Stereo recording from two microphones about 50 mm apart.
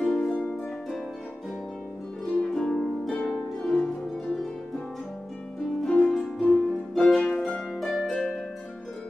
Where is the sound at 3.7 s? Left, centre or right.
Centre.